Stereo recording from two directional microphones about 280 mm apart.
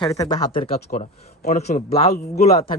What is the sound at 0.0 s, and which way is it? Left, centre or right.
Speech, centre.